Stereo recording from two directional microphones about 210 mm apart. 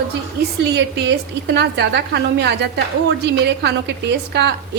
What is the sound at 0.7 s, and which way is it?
A woman's voice, 55° right (ahead or behind).